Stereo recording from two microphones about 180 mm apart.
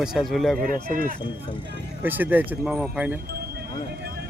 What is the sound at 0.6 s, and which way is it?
Speech, 50° right (ahead or behind).